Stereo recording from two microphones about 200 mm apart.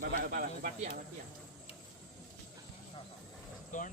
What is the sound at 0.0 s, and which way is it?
Speech, 45° right (ahead or behind).